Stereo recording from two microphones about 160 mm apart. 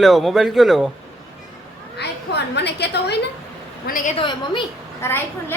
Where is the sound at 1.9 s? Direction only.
90° left.